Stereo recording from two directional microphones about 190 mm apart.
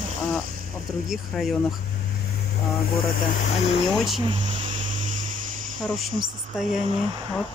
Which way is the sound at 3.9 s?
Centre (ahead or behind).